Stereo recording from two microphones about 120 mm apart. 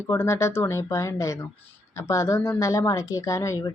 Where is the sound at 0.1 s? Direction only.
20° left (ahead or behind).